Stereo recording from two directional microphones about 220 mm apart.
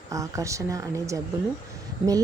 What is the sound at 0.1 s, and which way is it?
Speech, 15° right (ahead or behind).